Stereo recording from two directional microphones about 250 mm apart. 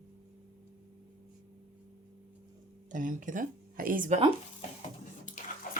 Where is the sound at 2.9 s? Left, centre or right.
Right.